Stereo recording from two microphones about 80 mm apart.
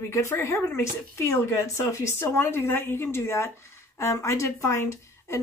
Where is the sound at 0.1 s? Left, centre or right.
Left.